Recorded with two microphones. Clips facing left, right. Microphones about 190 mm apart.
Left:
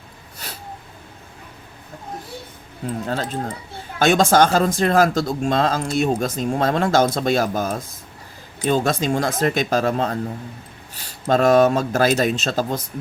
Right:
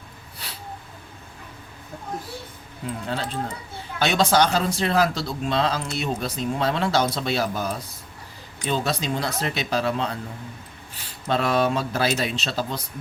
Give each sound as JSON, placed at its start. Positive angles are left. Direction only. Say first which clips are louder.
{"t": 0.3, "sound": "snort", "louder": "left 4 dB", "side_deg": 45}
{"t": 3.1, "sound": "speech", "louder": "left 2 dB", "side_deg": 45}
{"t": 11.3, "sound": "speech", "louder": "left 7 dB", "side_deg": 45}